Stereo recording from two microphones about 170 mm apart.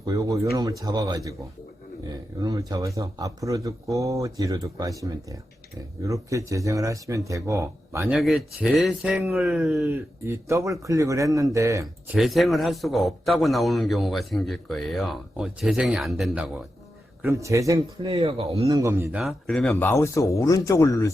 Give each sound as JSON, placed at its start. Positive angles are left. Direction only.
{"t": 0.0, "sound": "speech", "side_deg": -20}
{"t": 2.4, "sound": "speech", "side_deg": -20}
{"t": 6.0, "sound": "speech", "side_deg": -20}
{"t": 8.1, "sound": "a man's voice", "side_deg": 0}
{"t": 9.9, "sound": "speech", "side_deg": -15}
{"t": 12.1, "sound": "a man's voice", "side_deg": 0}
{"t": 17.2, "sound": "speech", "side_deg": -20}
{"t": 18.0, "sound": "speech", "side_deg": -35}
{"t": 18.7, "sound": "speech", "side_deg": -15}
{"t": 19.1, "sound": "a man's voice", "side_deg": 0}
{"t": 19.7, "sound": "speech", "side_deg": 15}